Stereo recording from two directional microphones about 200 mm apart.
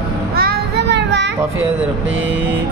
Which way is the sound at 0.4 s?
55° right (ahead or behind).